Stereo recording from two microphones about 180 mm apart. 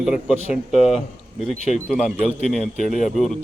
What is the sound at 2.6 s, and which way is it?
Speech, 45° left (ahead or behind).